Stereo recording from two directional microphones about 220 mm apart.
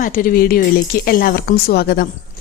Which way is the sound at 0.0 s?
40° left (ahead or behind).